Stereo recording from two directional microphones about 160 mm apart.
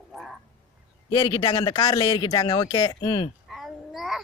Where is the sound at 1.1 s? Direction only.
30° left (ahead or behind).